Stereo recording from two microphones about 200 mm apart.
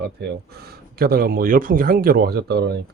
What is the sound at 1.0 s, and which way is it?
Speech, 50° right (ahead or behind).